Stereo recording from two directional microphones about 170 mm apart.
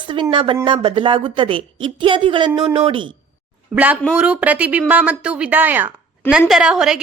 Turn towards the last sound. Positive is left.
turn(degrees=-5)  # may be behind; listen again after turning